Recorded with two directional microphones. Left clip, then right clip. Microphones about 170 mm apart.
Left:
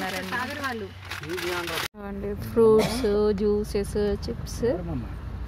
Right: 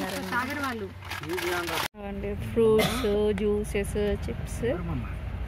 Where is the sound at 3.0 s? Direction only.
10° left (ahead or behind).